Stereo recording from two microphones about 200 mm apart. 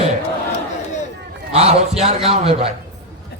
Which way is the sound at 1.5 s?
30° right (ahead or behind).